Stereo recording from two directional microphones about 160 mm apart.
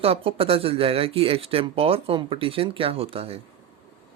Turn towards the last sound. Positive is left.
turn(degrees=-35)  # may be behind; listen again after turning